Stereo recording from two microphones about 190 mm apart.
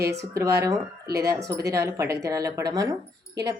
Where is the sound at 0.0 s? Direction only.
60° right (ahead or behind).